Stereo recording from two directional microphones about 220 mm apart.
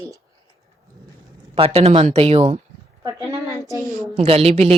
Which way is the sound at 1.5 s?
25° right (ahead or behind).